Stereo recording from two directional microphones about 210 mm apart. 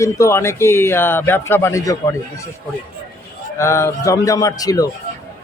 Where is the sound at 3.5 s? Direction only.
15° left (ahead or behind).